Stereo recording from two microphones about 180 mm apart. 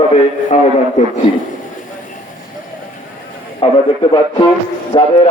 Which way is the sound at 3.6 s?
30° left (ahead or behind).